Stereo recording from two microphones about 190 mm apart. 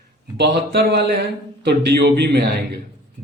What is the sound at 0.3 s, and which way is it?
A man's voice, 60° right (ahead or behind).